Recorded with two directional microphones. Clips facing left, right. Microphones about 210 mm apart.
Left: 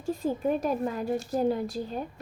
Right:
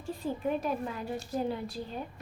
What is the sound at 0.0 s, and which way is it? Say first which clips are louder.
A woman's voice: left 5 dB; 45° left (ahead or behind).